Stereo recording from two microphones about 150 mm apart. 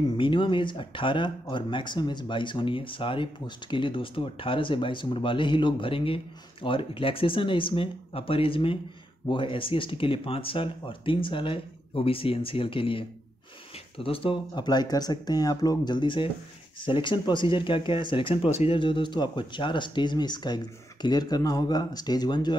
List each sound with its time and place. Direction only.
0.2 s speech: 35° left (ahead or behind)